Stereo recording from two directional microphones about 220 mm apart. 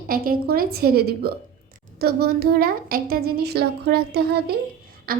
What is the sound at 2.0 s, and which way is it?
A woman's voice, 45° right (ahead or behind).